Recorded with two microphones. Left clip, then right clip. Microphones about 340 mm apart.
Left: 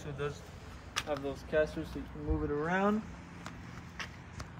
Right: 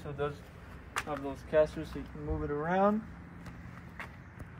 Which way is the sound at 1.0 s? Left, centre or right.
Right.